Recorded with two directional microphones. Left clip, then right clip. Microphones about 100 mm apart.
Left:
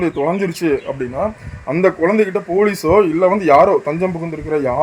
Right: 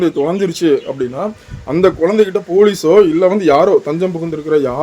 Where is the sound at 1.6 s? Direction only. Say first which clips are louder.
Right 2 dB; 15° right (ahead or behind).